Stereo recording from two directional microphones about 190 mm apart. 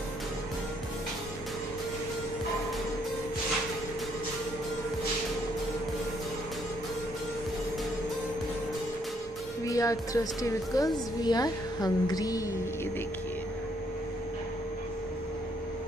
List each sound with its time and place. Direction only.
9.7 s a woman's voice: 20° left (ahead or behind)